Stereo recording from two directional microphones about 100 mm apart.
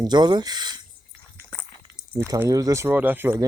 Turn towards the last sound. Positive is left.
turn(degrees=-20)  # may be behind; listen again after turning